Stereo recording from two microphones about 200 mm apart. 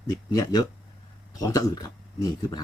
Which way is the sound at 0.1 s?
20° left (ahead or behind).